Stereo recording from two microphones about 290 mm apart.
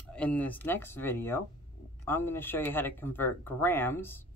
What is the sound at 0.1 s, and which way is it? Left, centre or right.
Speech, centre.